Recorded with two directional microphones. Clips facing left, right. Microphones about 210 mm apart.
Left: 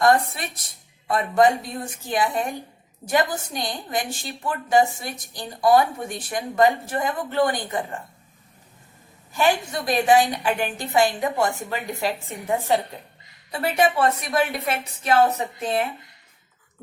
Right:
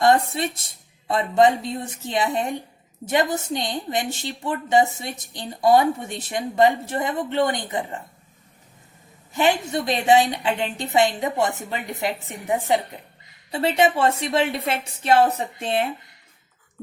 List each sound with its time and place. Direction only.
0.0 s a woman's voice: 25° right (ahead or behind)
9.3 s a woman's voice: 20° right (ahead or behind)